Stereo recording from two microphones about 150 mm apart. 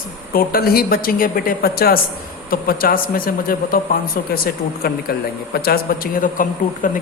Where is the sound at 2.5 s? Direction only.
75° left (ahead or behind).